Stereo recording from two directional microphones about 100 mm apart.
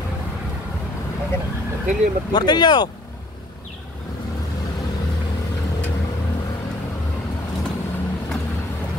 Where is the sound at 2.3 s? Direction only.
45° left (ahead or behind).